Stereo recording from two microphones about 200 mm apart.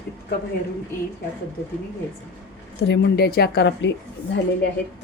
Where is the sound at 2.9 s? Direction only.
55° left (ahead or behind).